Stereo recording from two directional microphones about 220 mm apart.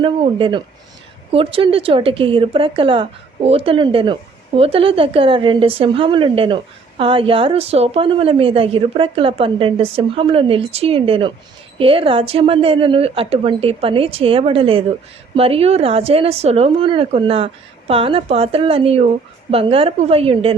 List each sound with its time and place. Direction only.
0.0 s speech: 25° right (ahead or behind)